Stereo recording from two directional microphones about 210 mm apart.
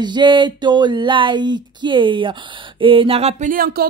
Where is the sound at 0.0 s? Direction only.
20° right (ahead or behind).